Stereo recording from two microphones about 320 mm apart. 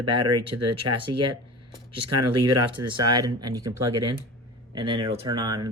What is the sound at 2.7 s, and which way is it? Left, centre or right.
Speech, centre.